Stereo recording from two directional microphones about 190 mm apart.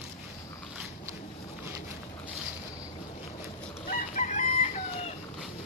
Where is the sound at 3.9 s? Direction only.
40° left (ahead or behind).